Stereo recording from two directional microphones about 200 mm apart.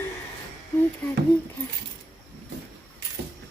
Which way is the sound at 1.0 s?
5° left (ahead or behind).